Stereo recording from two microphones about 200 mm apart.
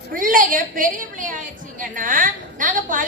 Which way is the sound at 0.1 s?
45° right (ahead or behind).